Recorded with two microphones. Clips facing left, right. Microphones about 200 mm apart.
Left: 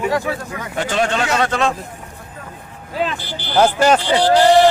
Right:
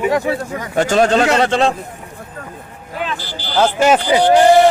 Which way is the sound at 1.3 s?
30° right (ahead or behind).